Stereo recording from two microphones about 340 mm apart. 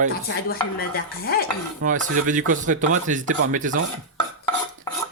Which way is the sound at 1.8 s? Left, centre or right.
Right.